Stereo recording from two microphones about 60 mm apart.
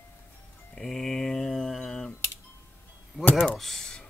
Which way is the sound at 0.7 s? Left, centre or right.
Centre.